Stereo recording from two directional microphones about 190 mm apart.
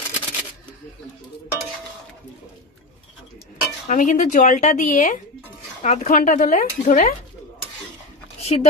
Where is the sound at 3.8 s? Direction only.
40° left (ahead or behind).